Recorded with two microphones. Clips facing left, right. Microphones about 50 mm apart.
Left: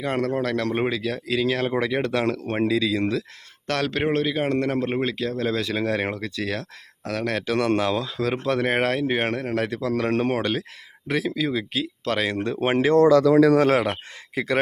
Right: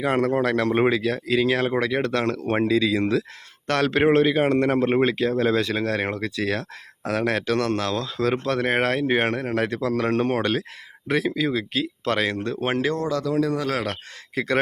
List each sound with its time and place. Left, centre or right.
0.0 s speech: centre
1.8 s speech: centre
5.5 s speech: centre
7.7 s speech: centre
12.4 s speech: centre
14.3 s a man's voice: centre